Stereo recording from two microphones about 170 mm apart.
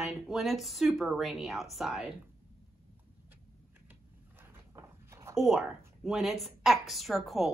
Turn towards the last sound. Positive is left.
turn(degrees=0)  # may be behind; listen again after turning